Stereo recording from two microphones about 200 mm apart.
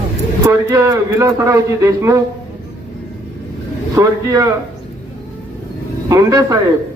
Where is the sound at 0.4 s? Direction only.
15° right (ahead or behind).